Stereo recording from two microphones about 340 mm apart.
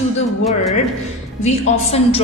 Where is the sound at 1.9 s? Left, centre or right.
Centre.